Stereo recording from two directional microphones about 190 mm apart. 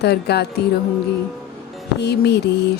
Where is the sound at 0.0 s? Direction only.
60° left (ahead or behind).